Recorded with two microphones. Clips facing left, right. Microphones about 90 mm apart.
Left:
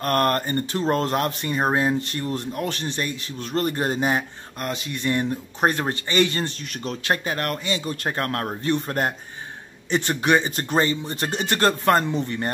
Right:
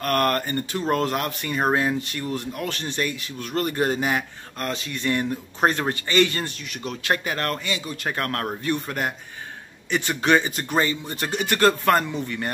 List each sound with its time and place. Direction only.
0.0 s speech: 30° left (ahead or behind)
2.0 s speech: 35° left (ahead or behind)
6.6 s speech: 35° left (ahead or behind); by 7.7 s 20° left (ahead or behind)
7.7 s a man's voice: 35° left (ahead or behind)
10.2 s speech: 20° left (ahead or behind)
10.5 s speech: 30° left (ahead or behind)